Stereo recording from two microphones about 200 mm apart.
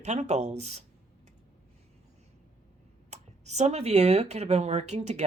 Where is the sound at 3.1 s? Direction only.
35° right (ahead or behind).